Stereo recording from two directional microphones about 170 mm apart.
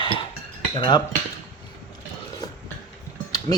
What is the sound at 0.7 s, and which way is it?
Cutlery, 25° left (ahead or behind).